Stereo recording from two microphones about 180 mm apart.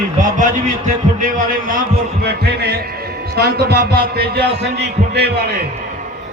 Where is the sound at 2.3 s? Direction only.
65° right (ahead or behind).